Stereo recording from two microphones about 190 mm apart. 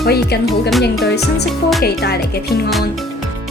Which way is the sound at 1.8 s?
60° left (ahead or behind).